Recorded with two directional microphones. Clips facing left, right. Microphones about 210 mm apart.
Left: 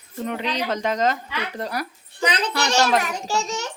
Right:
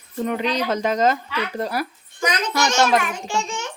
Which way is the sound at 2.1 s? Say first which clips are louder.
Left 1 dB; 30° left (ahead or behind).